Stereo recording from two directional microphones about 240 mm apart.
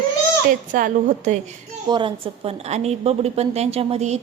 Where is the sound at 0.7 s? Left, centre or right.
Right.